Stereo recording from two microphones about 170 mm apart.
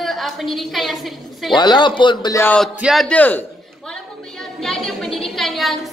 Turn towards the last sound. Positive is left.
turn(degrees=0)  # may be behind; listen again after turning